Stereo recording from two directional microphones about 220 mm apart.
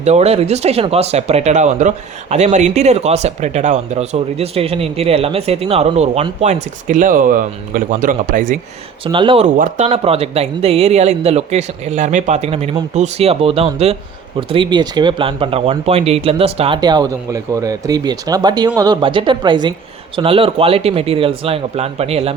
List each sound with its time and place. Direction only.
0.0 s speech: 30° right (ahead or behind)
9.1 s speech: 25° right (ahead or behind)